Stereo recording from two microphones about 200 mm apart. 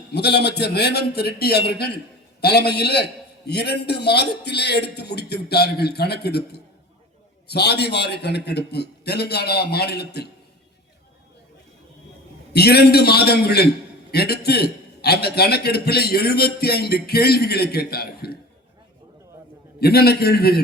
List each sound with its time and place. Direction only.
0.1 s a man's voice: 55° left (ahead or behind)
12.5 s a man's voice: 55° left (ahead or behind)
19.8 s a man's voice: 50° left (ahead or behind)